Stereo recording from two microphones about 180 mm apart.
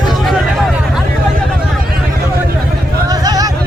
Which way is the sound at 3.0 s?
20° right (ahead or behind).